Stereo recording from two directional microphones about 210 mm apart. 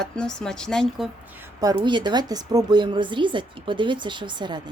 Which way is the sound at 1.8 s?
20° right (ahead or behind).